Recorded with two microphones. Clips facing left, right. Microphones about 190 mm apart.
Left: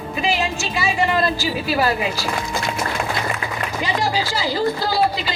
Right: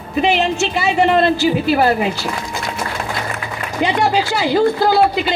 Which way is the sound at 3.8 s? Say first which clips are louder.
Right 7 dB; 65° right (ahead or behind).